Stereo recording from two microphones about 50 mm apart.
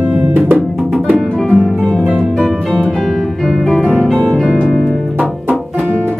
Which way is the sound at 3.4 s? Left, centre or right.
Centre.